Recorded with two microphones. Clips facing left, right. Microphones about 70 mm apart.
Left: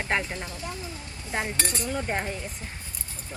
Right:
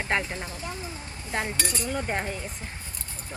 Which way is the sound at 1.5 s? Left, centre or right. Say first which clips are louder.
Even; left.